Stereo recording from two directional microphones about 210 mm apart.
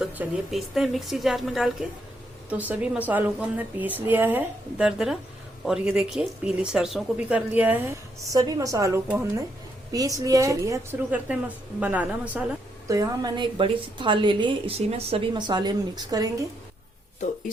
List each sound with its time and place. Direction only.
0.0 s speech: 5° right (ahead or behind)
12.9 s a woman's voice: 15° right (ahead or behind)